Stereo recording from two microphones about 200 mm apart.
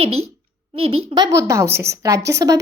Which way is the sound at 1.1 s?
15° right (ahead or behind).